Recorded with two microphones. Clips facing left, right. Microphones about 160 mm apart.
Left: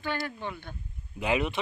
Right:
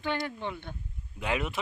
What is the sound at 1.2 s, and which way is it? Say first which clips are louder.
Speech: left 4 dB; 5° left (ahead or behind).